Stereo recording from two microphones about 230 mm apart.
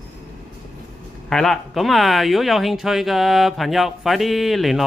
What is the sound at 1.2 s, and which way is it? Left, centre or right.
Speech, centre.